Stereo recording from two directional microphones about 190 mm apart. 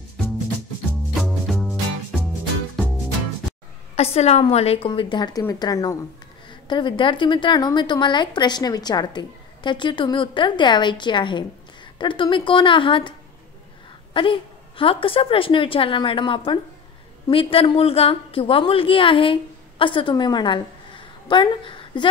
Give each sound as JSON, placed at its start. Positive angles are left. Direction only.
{"t": 1.2, "sound": "music", "side_deg": 0}
{"t": 3.9, "sound": "a woman's voice", "side_deg": 30}
{"t": 14.1, "sound": "a woman's voice", "side_deg": 25}